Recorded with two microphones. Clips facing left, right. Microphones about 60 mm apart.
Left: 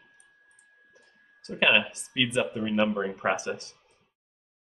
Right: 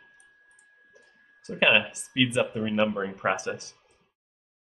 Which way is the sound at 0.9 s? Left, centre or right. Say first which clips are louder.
Right 2 dB; centre.